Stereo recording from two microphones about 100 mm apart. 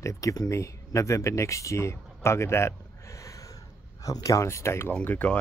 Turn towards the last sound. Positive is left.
turn(degrees=15)  # may be behind; listen again after turning